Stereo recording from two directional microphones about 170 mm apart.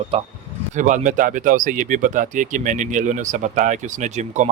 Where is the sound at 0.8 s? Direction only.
50° right (ahead or behind).